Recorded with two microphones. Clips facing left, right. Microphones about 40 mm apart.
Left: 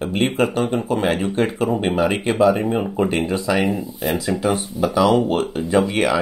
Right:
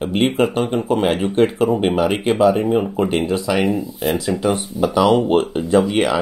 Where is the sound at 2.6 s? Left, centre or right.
Centre.